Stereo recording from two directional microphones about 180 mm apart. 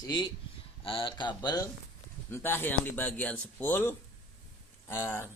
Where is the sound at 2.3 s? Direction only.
10° left (ahead or behind).